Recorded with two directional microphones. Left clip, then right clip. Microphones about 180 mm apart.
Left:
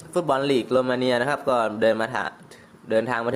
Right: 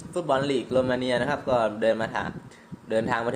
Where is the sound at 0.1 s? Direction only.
25° left (ahead or behind).